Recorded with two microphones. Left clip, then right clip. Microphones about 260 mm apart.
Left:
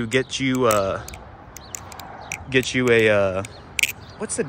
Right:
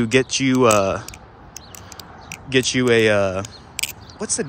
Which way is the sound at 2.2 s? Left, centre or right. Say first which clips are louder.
Right 2 dB; centre.